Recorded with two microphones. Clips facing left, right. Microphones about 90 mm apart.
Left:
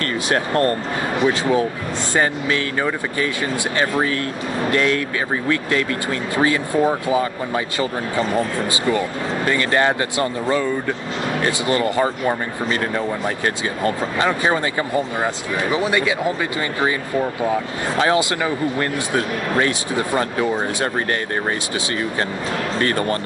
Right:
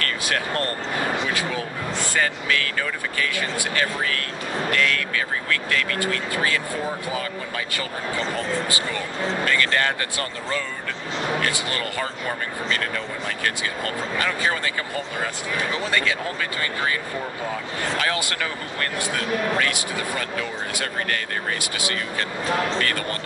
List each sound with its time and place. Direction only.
0.0 s speech: 25° left (ahead or behind)
8.7 s speech: 25° left (ahead or behind)
17.9 s speech: 25° left (ahead or behind)
22.8 s speech: 30° left (ahead or behind)